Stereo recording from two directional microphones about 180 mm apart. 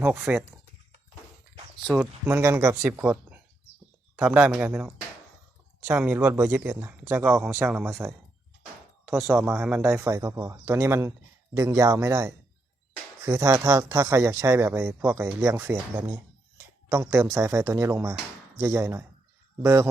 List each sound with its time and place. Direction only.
0.0 s speech: 10° right (ahead or behind)
1.9 s speech: 10° right (ahead or behind)
9.0 s speech: 5° right (ahead or behind)